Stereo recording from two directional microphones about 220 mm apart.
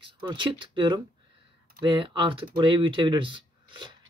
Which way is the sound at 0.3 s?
20° right (ahead or behind).